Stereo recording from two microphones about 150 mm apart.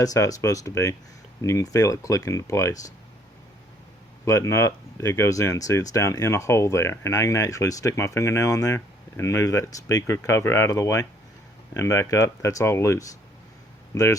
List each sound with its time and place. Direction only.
0.0 s speech: 25° left (ahead or behind)
4.3 s speech: 20° left (ahead or behind)